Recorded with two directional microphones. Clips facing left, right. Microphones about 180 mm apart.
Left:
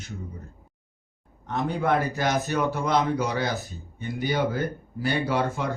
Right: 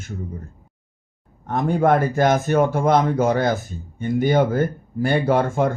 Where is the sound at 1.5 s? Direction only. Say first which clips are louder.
Right 7 dB; 50° right (ahead or behind).